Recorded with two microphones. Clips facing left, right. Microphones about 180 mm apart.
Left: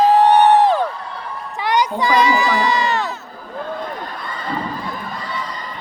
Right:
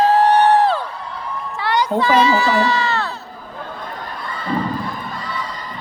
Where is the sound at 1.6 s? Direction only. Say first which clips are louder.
Even; 15° left (ahead or behind).